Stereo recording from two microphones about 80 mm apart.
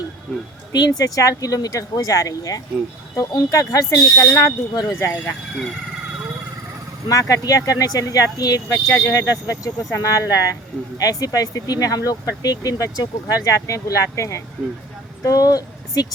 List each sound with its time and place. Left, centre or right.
0.7 s speech: left
4.9 s speech: left
7.1 s speech: left